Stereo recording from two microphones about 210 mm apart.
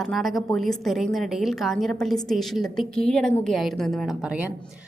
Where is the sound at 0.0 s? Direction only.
Centre (ahead or behind).